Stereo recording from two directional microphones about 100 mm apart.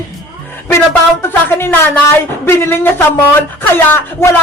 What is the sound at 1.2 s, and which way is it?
Speech, 20° left (ahead or behind).